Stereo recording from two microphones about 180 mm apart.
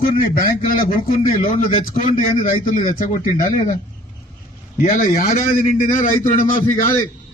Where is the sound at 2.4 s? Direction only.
50° left (ahead or behind).